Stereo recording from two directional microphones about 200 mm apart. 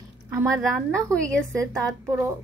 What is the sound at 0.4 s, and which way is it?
A woman's voice, 10° right (ahead or behind).